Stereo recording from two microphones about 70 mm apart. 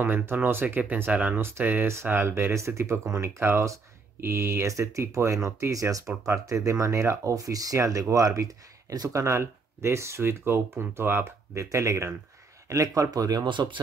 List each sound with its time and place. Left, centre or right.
0.0 s speech: right
4.6 s speech: right
6.2 s speech: right
9.1 s speech: right
11.5 s speech: right